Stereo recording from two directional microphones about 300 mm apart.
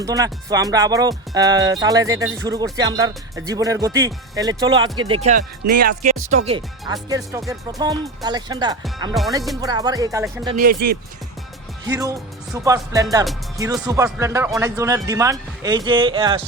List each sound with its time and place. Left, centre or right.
0.0 s speech: centre
10.6 s speech: right
11.9 s speech: centre